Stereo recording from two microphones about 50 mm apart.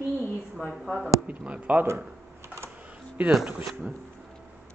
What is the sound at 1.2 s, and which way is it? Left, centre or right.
Speech, right.